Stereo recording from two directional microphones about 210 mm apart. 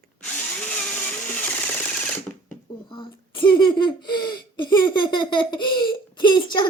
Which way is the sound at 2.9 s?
25° left (ahead or behind).